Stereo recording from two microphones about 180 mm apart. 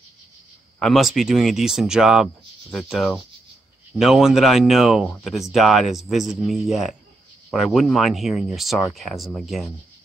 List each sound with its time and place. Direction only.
0.7 s speech: centre (ahead or behind)